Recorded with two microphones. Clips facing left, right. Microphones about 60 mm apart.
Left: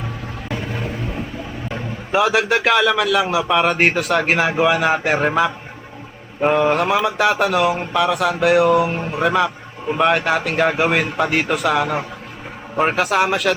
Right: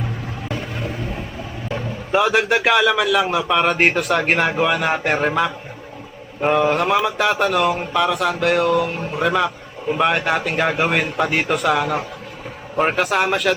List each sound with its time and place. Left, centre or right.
2.1 s a man's voice: centre